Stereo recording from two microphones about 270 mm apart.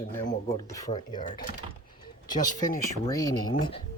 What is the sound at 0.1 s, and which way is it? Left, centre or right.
Speech, centre.